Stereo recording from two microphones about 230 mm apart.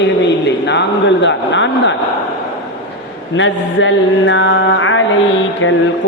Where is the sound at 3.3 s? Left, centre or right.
Left.